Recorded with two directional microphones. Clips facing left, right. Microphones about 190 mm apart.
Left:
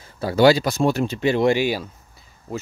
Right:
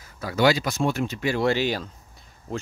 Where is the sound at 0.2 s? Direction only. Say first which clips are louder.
Left 6 dB; 30° left (ahead or behind).